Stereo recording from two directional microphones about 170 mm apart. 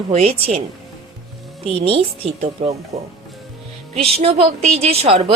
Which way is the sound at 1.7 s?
35° right (ahead or behind).